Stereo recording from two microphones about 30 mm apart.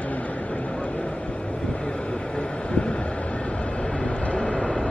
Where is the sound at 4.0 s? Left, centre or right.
Left.